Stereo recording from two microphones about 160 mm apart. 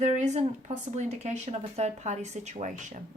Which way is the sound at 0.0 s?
45° right (ahead or behind).